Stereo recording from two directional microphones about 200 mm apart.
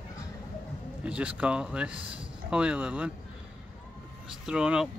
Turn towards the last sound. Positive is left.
turn(degrees=-5)  # may be behind; listen again after turning